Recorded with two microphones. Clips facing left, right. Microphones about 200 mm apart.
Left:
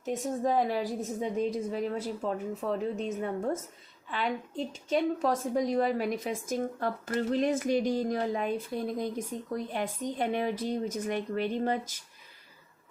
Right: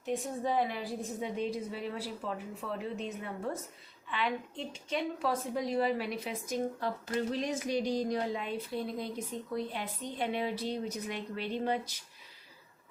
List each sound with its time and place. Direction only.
0.0 s a woman's voice: 40° left (ahead or behind)